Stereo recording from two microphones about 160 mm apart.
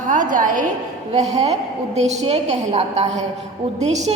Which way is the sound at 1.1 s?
45° right (ahead or behind).